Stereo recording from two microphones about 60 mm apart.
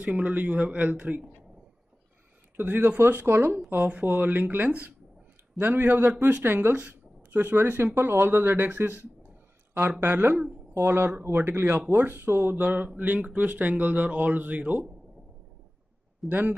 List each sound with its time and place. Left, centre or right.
0.0 s speech: right
2.5 s speech: right
6.7 s speech: right
10.0 s speech: right
10.8 s speech: right
16.3 s speech: right